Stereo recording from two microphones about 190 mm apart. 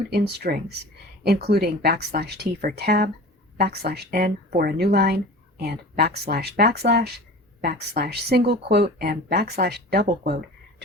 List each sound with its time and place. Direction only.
0.1 s speech: 55° right (ahead or behind)